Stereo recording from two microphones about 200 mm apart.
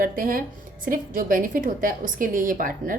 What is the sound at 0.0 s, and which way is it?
Speech, 45° right (ahead or behind).